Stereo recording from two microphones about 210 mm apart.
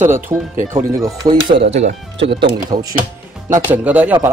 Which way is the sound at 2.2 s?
55° right (ahead or behind).